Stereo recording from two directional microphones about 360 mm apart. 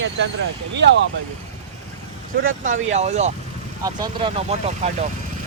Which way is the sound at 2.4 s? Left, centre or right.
Right.